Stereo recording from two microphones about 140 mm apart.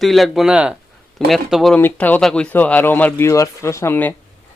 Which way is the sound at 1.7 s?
15° left (ahead or behind).